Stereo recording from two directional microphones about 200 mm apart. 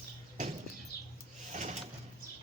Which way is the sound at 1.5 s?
35° right (ahead or behind).